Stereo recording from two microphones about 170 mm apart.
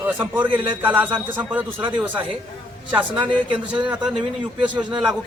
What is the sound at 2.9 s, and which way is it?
A man's voice, 10° right (ahead or behind).